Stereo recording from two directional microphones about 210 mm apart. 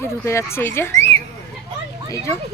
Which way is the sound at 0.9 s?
30° right (ahead or behind).